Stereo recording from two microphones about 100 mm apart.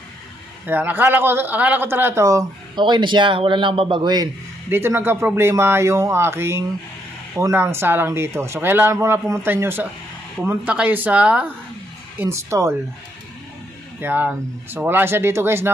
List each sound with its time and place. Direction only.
0.7 s speech: 20° right (ahead or behind)
2.7 s a man's voice: 50° right (ahead or behind)
4.7 s speech: 25° right (ahead or behind)
12.2 s speech: 25° right (ahead or behind)
14.0 s speech: 20° right (ahead or behind)